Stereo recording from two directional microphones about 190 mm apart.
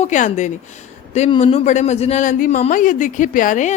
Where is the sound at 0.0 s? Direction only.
40° left (ahead or behind).